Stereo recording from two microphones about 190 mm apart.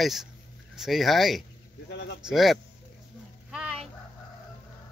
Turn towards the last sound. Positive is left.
turn(degrees=-5)  # may be behind; listen again after turning